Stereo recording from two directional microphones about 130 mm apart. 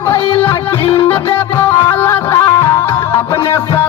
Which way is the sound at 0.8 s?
45° left (ahead or behind).